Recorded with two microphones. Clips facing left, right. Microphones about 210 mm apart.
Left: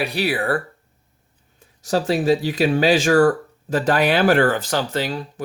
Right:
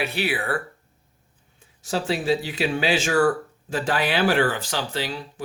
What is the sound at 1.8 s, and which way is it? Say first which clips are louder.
Speech: left 6 dB; 40° left (ahead or behind).